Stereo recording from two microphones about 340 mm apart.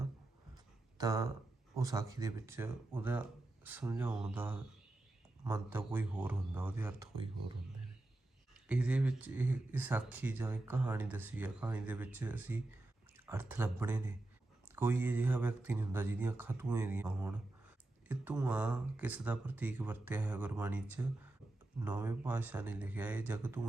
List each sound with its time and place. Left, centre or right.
0.5 s a sound: centre
1.7 s speech: centre
8.6 s speech: centre